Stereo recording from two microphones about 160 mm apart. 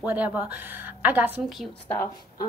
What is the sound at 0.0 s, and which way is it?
Speech, 10° right (ahead or behind).